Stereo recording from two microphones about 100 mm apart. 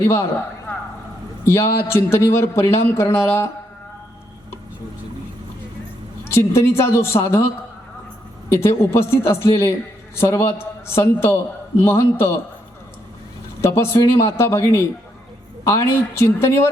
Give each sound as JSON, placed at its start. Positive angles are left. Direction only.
{"t": 0.0, "sound": "a man's voice", "side_deg": 25}
{"t": 0.7, "sound": "a sound", "side_deg": 20}
{"t": 1.5, "sound": "a man's voice", "side_deg": 25}
{"t": 6.2, "sound": "a man's voice", "side_deg": 25}
{"t": 8.5, "sound": "a man's voice", "side_deg": 25}
{"t": 13.6, "sound": "a man's voice", "side_deg": 25}